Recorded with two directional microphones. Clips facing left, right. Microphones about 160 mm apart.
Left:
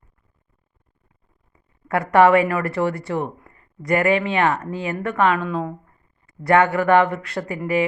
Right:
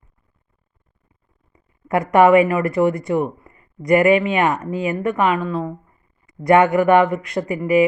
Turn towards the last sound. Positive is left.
turn(degrees=-15)  # may be behind; listen again after turning